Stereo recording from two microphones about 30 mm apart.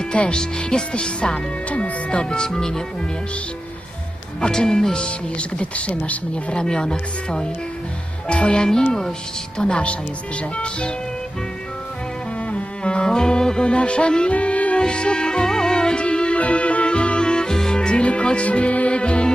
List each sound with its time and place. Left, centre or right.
0.0 s music: left
0.3 s speech: left
2.5 s speech: centre
4.4 s speech: left
4.9 s speech: left
6.5 s speech: left
8.3 s speech: left
8.5 s speech: left
12.5 s music: left
13.7 s speech: left
14.3 s music: left
14.8 s music: left
17.5 s music: centre
17.7 s music: left